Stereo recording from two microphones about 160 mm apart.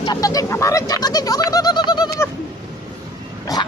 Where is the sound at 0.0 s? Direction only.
25° left (ahead or behind).